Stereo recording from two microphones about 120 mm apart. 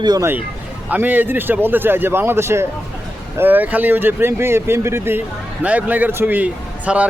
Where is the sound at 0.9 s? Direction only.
15° right (ahead or behind).